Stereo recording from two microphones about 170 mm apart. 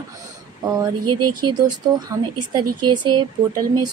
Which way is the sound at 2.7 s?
25° right (ahead or behind).